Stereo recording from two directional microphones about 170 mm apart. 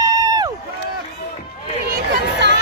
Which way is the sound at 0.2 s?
20° right (ahead or behind).